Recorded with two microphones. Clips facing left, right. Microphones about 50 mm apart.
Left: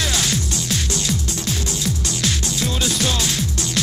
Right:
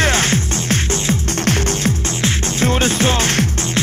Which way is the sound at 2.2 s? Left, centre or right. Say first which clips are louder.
Right 6 dB; right.